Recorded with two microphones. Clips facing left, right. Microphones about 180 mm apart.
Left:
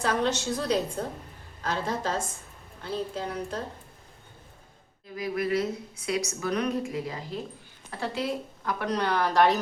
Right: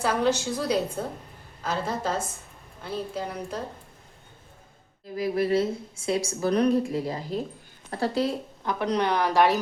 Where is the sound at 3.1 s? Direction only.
10° right (ahead or behind).